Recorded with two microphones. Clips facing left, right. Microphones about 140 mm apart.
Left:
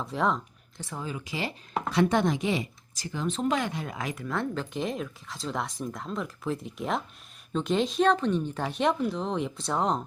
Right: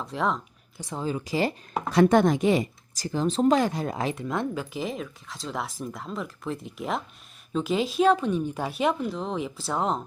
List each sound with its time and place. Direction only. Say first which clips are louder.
0.0 s speech: even; centre (ahead or behind)
0.8 s speech: right 3 dB; 15° right (ahead or behind)
1.0 s speech: right 8 dB; 35° right (ahead or behind); by 4.6 s 15° right (ahead or behind)
4.7 s speech: even; centre (ahead or behind)